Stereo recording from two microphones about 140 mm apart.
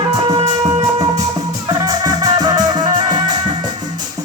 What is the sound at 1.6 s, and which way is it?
Music, 30° right (ahead or behind).